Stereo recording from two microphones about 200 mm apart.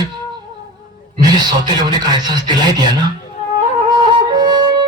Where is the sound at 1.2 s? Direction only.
20° right (ahead or behind).